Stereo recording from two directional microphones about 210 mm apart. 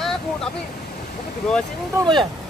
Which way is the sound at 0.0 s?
Centre (ahead or behind).